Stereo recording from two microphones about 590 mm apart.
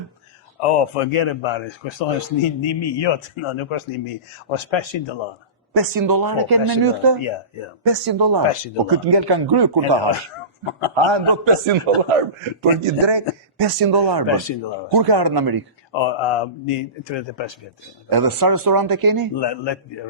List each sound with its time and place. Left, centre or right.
0.6 s speech: left
5.7 s speech: right
10.7 s speech: left
10.9 s a man's voice: right
14.5 s speech: left
14.9 s speech: right
15.9 s speech: left
18.1 s speech: right
19.4 s speech: left